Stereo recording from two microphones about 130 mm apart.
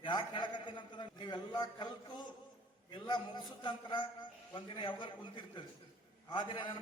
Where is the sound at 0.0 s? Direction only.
35° left (ahead or behind).